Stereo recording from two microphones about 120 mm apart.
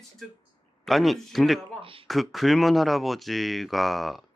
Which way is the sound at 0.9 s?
Centre (ahead or behind).